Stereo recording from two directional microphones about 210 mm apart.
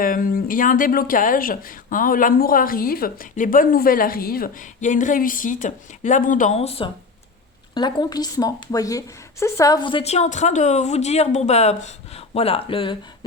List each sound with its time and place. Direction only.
0.0 s a woman's voice: 40° left (ahead or behind); by 13.0 s 25° left (ahead or behind)